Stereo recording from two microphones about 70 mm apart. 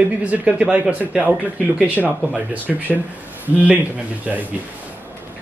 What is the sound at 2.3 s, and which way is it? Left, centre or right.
Speech, right.